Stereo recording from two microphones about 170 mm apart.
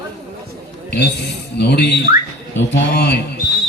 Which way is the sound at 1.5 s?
80° left.